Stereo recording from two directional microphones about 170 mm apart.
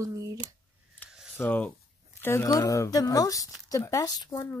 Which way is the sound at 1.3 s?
10° left (ahead or behind).